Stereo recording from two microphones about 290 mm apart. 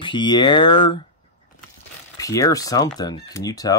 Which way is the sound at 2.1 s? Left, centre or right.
Centre.